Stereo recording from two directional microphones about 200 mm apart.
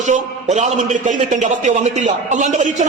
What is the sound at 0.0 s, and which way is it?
A man's voice, 35° right (ahead or behind).